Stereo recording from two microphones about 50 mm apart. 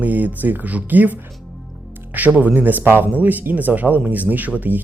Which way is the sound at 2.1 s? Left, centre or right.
Right.